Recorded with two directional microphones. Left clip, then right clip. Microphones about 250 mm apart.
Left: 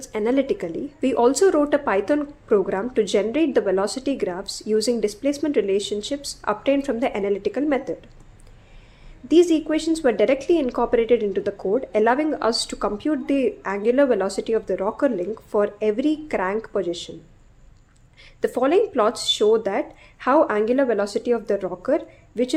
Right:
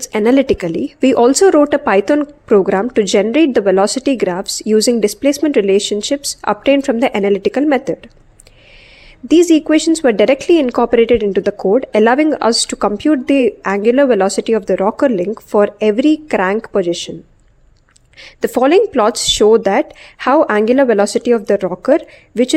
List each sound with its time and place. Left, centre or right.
0.0 s speech: right
9.2 s speech: right
18.2 s speech: right